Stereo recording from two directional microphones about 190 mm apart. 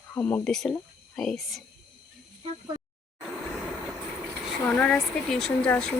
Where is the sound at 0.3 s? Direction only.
5° left (ahead or behind).